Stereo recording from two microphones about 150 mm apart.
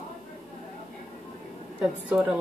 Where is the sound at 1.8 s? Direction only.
10° right (ahead or behind).